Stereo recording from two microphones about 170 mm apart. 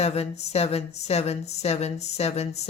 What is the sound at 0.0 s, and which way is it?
Speech, 40° left (ahead or behind).